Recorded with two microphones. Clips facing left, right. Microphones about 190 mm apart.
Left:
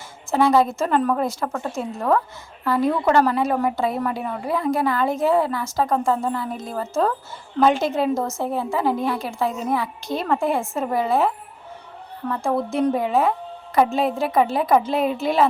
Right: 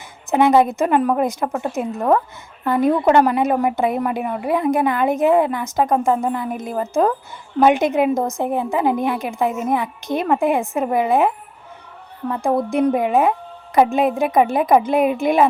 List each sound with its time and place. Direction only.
0.3 s a woman's voice: 20° right (ahead or behind)